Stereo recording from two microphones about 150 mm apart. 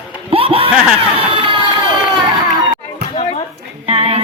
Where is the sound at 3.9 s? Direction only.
45° right (ahead or behind).